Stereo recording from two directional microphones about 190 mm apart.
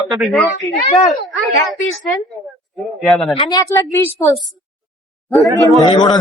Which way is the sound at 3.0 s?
Centre (ahead or behind).